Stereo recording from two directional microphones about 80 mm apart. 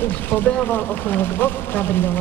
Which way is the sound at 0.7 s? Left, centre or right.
Left.